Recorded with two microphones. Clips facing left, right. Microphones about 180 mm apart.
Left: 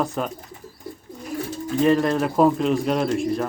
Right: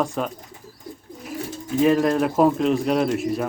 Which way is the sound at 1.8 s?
5° right (ahead or behind).